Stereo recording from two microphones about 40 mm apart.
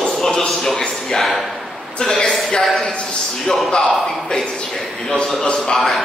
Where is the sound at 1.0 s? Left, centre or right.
Centre.